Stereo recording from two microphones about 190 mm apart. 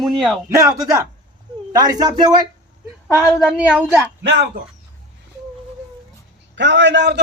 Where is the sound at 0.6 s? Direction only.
20° right (ahead or behind).